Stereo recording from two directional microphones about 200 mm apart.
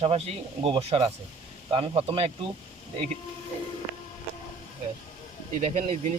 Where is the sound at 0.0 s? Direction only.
30° right (ahead or behind).